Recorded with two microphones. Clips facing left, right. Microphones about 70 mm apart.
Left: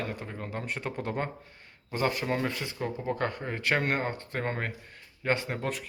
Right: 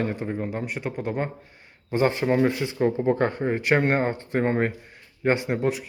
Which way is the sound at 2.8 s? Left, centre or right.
Right.